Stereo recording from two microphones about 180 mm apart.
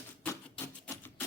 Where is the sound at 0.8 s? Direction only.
10° left (ahead or behind).